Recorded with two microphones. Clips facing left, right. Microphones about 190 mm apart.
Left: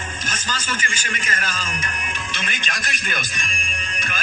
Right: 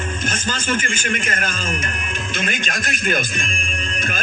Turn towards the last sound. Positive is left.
turn(degrees=-50)  # may be behind; listen again after turning